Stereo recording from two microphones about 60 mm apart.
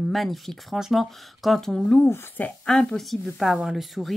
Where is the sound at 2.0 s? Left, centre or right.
Left.